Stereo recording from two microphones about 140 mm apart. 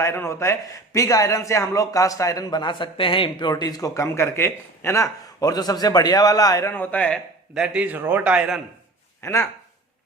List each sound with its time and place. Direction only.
0.0 s a man's voice: 20° left (ahead or behind)
6.7 s a man's voice: 10° left (ahead or behind)
7.5 s a man's voice: 5° right (ahead or behind)
9.2 s a man's voice: 20° left (ahead or behind)